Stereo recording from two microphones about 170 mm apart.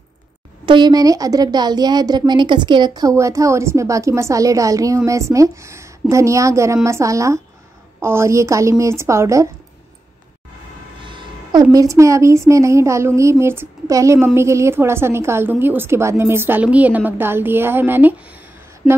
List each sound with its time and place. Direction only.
0.7 s a woman's voice: 25° right (ahead or behind)
11.6 s a woman's voice: 20° right (ahead or behind)
18.8 s a sound: 5° right (ahead or behind)